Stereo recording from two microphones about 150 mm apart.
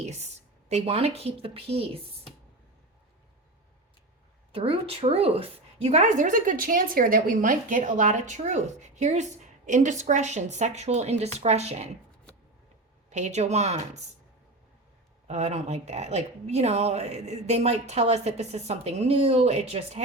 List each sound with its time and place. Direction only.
0.0 s speech: 50° right (ahead or behind)
4.5 s a woman's voice: 40° right (ahead or behind)
13.1 s a woman's voice: 50° right (ahead or behind)
15.3 s a woman's voice: 45° right (ahead or behind)